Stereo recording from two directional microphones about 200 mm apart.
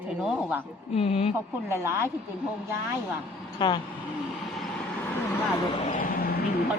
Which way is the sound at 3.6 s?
20° left (ahead or behind).